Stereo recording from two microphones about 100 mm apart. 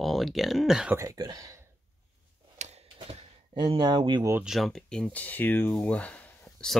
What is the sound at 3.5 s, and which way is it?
Speech, 55° right (ahead or behind).